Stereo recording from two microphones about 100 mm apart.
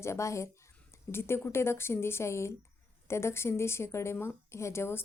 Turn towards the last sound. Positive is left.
turn(degrees=25)  # may be behind; listen again after turning